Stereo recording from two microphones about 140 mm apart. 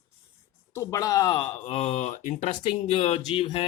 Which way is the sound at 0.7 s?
20° left (ahead or behind).